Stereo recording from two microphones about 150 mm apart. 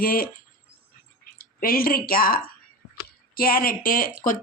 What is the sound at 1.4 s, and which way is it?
A woman's voice, 75° left (ahead or behind).